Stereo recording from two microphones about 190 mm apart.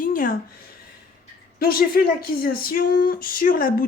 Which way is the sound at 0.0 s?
45° left (ahead or behind).